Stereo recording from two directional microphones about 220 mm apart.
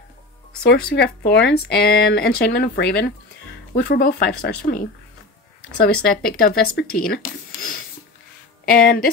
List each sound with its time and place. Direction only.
0.7 s speech: 45° left (ahead or behind)